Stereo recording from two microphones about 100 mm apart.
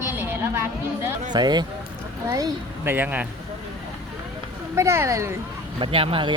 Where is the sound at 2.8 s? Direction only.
20° right (ahead or behind).